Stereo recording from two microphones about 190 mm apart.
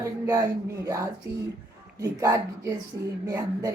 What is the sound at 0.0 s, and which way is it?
Speech, 15° right (ahead or behind).